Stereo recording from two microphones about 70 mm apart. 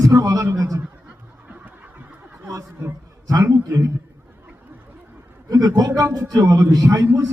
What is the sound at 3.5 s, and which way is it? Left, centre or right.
Snicker, right.